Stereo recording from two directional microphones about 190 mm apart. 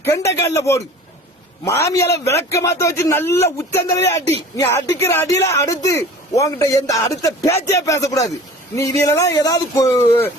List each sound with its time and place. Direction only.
0.0 s speech: 15° left (ahead or behind)